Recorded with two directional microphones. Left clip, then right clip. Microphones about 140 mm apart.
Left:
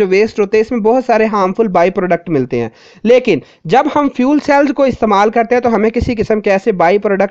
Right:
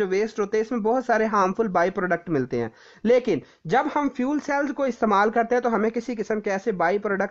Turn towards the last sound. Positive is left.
turn(degrees=25)  # may be behind; listen again after turning